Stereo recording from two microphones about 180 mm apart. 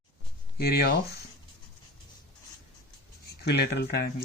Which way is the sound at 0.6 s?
65° left (ahead or behind).